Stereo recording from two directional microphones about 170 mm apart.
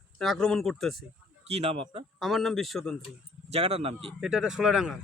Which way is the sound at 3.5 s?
35° right (ahead or behind).